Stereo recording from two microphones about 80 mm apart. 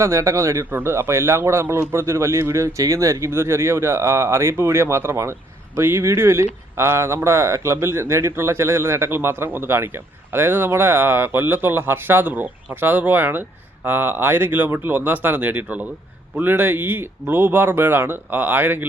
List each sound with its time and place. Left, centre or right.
0.0 s speech: right
0.6 s speech: right